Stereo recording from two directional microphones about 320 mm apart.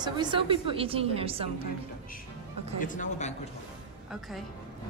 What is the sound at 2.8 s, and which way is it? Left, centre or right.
Speech, left.